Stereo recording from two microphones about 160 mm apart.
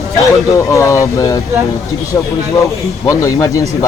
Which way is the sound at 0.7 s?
20° left (ahead or behind).